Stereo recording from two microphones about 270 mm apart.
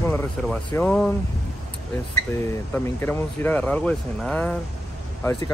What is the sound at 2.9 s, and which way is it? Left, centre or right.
Speech, centre.